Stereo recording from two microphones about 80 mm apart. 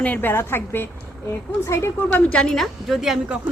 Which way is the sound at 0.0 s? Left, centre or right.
Left.